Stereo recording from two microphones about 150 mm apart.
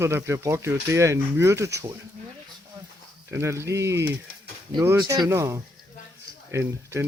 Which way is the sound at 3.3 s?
20° right (ahead or behind).